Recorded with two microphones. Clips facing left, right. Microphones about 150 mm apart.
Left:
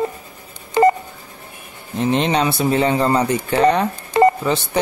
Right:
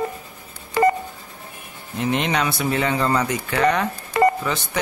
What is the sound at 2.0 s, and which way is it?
Speech, 30° left (ahead or behind).